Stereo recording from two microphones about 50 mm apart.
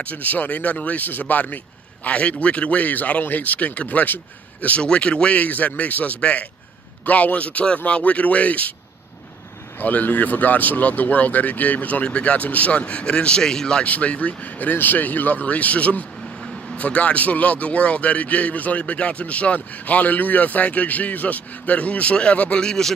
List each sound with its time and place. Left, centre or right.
0.0 s a man's voice: left
9.8 s speech: left; by 13.8 s centre
13.8 s a man's voice: left; by 22.9 s centre